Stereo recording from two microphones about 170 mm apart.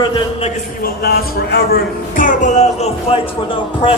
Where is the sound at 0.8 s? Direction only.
65° left (ahead or behind); by 3.2 s 40° left (ahead or behind).